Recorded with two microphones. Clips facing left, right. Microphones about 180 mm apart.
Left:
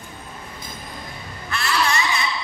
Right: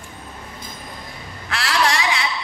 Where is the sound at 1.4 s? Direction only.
90° right.